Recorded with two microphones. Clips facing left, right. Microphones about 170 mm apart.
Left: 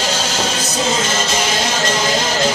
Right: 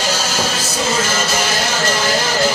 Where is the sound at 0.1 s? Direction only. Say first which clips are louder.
Even; 25° left (ahead or behind).